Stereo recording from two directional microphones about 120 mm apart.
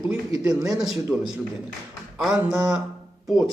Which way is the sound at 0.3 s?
30° right (ahead or behind).